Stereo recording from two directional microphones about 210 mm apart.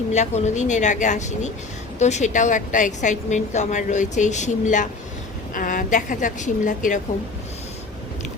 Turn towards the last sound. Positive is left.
turn(degrees=35)  # may be behind; listen again after turning